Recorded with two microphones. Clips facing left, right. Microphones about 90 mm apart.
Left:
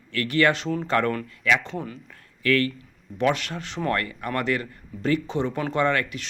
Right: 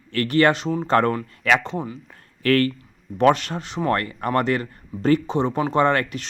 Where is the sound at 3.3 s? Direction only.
30° right (ahead or behind).